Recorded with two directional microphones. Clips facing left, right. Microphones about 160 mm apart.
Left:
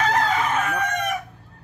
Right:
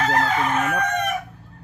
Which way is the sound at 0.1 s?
5° right (ahead or behind).